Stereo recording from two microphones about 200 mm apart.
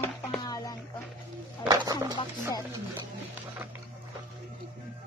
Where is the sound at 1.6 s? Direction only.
20° right (ahead or behind).